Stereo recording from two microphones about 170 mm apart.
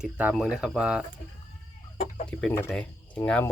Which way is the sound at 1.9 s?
45° left (ahead or behind).